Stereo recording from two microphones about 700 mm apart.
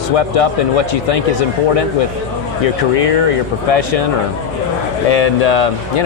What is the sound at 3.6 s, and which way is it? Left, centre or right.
Speech, left.